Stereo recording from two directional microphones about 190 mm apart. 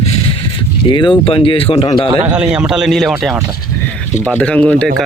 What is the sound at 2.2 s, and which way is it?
Speech, 5° right (ahead or behind).